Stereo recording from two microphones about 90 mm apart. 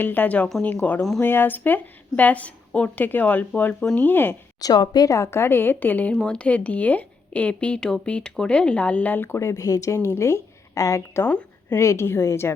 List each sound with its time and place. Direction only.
0.0 s a woman's voice: 20° left (ahead or behind)
4.6 s a woman's voice: 50° left (ahead or behind)
5.1 s a woman's voice: 30° left (ahead or behind)